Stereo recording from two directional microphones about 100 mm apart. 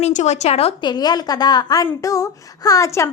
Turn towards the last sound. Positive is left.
turn(degrees=30)  # may be behind; listen again after turning